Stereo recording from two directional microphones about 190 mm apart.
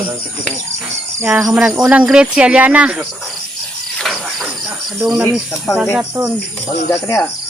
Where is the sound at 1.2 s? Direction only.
15° right (ahead or behind).